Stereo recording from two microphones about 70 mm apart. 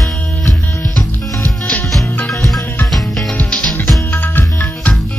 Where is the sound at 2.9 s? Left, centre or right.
Centre.